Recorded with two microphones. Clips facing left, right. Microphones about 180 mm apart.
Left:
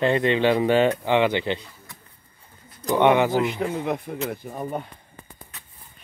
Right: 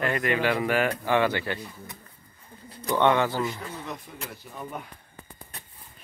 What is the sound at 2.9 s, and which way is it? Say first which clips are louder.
Speech: left 4 dB; 15° left (ahead or behind).